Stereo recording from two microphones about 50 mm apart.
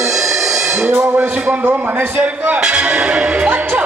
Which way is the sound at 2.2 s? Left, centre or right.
Right.